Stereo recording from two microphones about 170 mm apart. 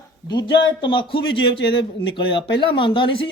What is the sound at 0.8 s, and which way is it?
A man's voice, 30° left (ahead or behind).